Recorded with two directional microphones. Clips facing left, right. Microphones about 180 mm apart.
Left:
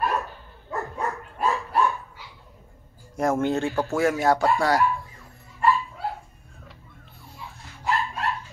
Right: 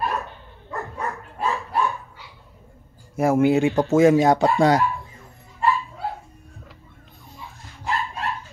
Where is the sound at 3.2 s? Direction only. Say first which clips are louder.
Right 5 dB; 10° right (ahead or behind).